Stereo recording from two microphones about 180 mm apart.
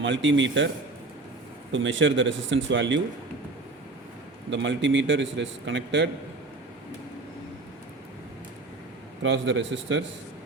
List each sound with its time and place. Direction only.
0.0 s a man's voice: 90° right
1.7 s a man's voice: 90° right
4.5 s a man's voice: 90° right
9.2 s a man's voice: 85° right